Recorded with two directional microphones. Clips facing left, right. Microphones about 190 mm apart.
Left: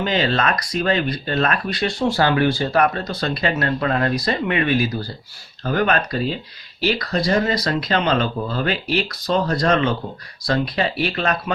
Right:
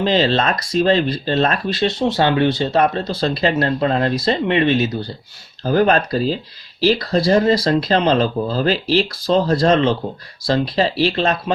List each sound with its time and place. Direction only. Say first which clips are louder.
0.0 s speech: right 4 dB; 30° right (ahead or behind)
5.6 s speech: right 5 dB; 35° right (ahead or behind)